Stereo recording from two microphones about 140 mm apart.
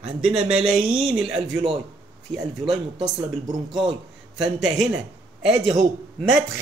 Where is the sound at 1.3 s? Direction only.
40° right (ahead or behind).